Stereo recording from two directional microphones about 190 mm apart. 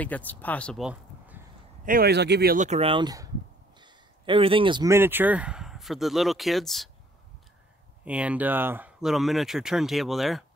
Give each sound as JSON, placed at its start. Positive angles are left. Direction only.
{"t": 0.0, "sound": "speech", "side_deg": 10}
{"t": 0.8, "sound": "a sound", "side_deg": -10}
{"t": 1.9, "sound": "speech", "side_deg": -55}
{"t": 2.6, "sound": "speech", "side_deg": -35}
{"t": 8.0, "sound": "speech", "side_deg": -5}